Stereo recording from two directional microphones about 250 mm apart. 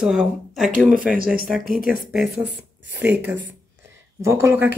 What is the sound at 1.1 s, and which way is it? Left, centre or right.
Speech, right.